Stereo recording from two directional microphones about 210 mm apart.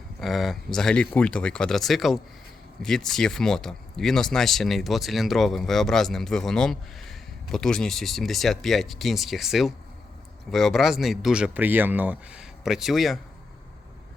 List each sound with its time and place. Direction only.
0.2 s speech: centre (ahead or behind)